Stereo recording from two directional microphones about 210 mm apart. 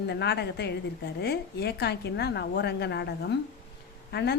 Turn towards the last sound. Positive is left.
turn(degrees=50)  # may be behind; listen again after turning